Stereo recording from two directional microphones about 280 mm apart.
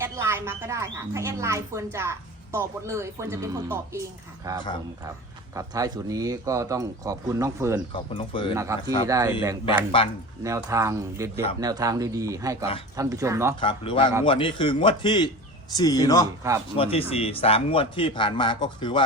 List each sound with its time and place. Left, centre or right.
0.0 s speech: centre
7.9 s speech: centre
8.5 s speech: centre
10.0 s speech: centre
10.4 s speech: centre
13.6 s speech: centre